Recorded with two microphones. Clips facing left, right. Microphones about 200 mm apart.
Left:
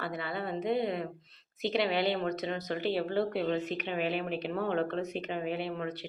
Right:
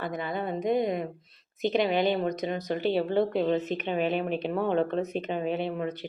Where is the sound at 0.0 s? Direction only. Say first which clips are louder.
Right 4 dB; 20° right (ahead or behind).